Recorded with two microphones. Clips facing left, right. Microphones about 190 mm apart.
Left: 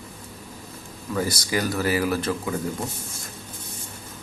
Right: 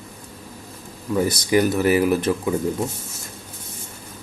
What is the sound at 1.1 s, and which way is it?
Speech, 20° right (ahead or behind).